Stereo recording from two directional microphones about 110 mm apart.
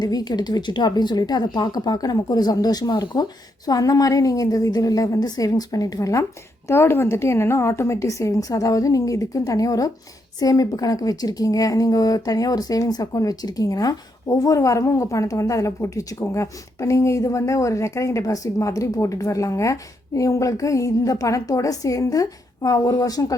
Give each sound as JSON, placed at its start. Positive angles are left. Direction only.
{"t": 0.0, "sound": "a woman's voice", "side_deg": 35}